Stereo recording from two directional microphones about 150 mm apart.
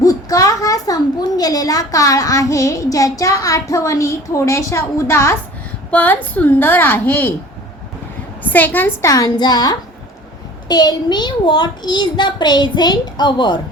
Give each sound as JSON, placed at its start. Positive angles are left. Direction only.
{"t": 0.0, "sound": "a sound", "side_deg": 25}
{"t": 1.4, "sound": "a child's voice", "side_deg": 25}
{"t": 8.4, "sound": "a child's voice", "side_deg": 10}